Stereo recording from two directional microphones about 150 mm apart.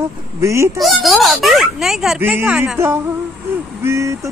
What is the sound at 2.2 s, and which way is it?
Speech, 15° right (ahead or behind).